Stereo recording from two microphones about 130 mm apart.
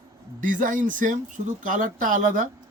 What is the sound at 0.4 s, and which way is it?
Speech, 90° right.